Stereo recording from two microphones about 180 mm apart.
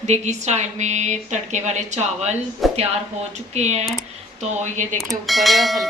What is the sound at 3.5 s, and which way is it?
A woman's voice, 35° right (ahead or behind).